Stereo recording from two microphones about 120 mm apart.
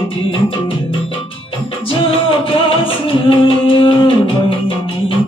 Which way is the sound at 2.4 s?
45° left (ahead or behind).